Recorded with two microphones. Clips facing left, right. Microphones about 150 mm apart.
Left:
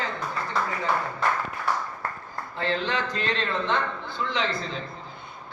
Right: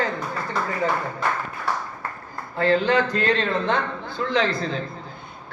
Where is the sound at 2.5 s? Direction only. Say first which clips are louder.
Right 8 dB; 45° right (ahead or behind).